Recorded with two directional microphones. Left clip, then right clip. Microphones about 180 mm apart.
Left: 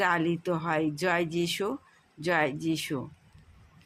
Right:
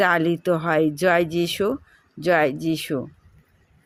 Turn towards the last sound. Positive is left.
turn(degrees=-30)  # may be behind; listen again after turning